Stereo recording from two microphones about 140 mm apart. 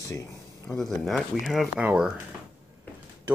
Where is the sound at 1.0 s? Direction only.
Centre (ahead or behind).